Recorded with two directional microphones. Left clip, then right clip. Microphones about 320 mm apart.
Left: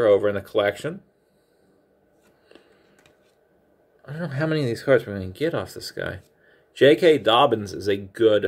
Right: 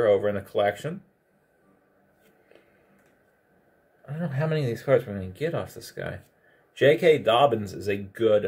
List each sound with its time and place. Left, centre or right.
0.0 s speech: left
4.0 s speech: left